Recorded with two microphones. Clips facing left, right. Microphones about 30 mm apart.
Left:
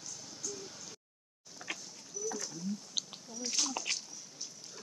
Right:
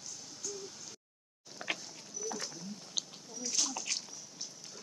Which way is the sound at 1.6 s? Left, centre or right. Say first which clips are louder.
Right 4 dB; right.